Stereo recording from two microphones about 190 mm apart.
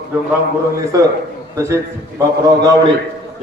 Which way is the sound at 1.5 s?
15° right (ahead or behind).